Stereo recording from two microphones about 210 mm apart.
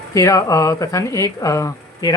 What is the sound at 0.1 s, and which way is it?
Speech, 15° left (ahead or behind).